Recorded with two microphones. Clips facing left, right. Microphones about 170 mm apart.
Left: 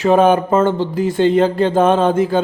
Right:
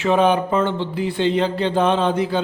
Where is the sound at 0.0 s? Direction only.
45° left (ahead or behind).